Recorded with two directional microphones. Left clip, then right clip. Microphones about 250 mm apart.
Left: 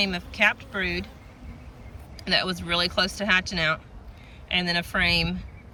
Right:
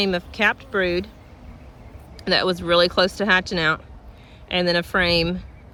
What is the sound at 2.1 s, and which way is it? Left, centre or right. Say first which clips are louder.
Speech: right 4 dB; centre.